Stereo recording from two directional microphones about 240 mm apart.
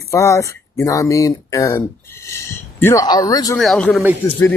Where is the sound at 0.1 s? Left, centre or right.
Centre.